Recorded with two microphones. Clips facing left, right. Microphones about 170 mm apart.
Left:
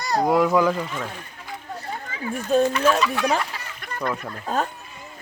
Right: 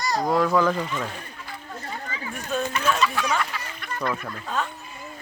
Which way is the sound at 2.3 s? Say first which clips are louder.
Left 9 dB; 35° left (ahead or behind).